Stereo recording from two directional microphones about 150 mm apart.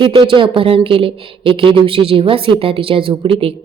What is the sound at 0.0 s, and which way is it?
Speech, 35° right (ahead or behind).